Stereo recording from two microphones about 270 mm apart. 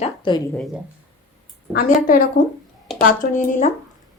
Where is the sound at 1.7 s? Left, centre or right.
Left.